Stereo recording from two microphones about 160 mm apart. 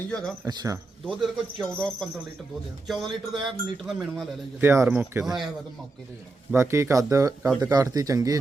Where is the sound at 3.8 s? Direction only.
Centre (ahead or behind).